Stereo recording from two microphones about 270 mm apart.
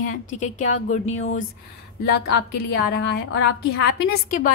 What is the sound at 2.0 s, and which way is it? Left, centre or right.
A woman's voice, left.